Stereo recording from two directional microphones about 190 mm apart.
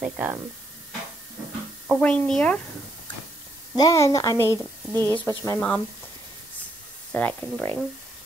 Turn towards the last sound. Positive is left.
turn(degrees=10)  # may be behind; listen again after turning